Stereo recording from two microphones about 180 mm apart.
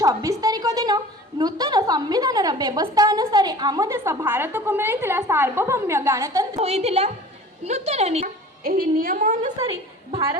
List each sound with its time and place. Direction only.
0.0 s a woman's voice: 20° right (ahead or behind)
6.6 s a woman's voice: 35° right (ahead or behind)
8.6 s a woman's voice: 55° right (ahead or behind)